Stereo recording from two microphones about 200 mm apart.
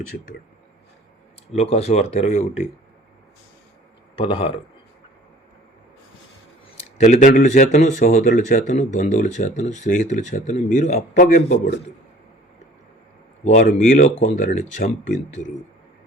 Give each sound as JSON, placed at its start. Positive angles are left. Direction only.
{"t": 1.5, "sound": "speech", "side_deg": 30}
{"t": 4.2, "sound": "speech", "side_deg": 25}
{"t": 7.0, "sound": "speech", "side_deg": 40}
{"t": 13.4, "sound": "speech", "side_deg": 40}